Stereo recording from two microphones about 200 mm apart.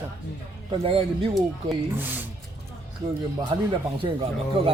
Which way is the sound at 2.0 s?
10° right (ahead or behind).